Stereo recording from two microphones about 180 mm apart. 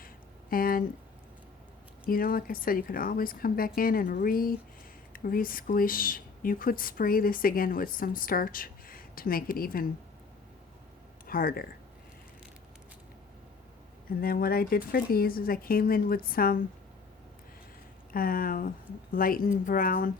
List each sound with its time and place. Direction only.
0.5 s speech: 55° left (ahead or behind)
2.0 s speech: 55° left (ahead or behind)
11.3 s speech: 55° left (ahead or behind)
14.2 s speech: 55° left (ahead or behind)
18.1 s speech: 55° left (ahead or behind)